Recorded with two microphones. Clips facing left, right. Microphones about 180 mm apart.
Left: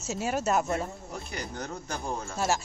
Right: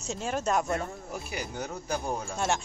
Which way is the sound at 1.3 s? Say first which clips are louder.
Right 1 dB; 5° right (ahead or behind).